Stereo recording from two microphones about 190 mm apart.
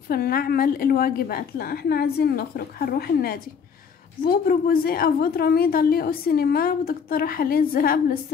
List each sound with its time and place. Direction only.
0.1 s a woman's voice: 50° left (ahead or behind)